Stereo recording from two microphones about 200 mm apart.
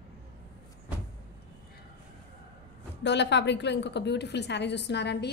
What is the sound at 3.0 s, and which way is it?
A woman's voice, 60° left (ahead or behind).